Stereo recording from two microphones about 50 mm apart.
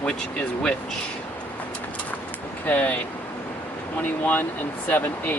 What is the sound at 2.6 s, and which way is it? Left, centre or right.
Speech, left.